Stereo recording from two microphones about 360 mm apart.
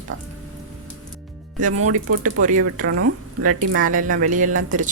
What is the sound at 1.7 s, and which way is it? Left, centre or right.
Speech, right.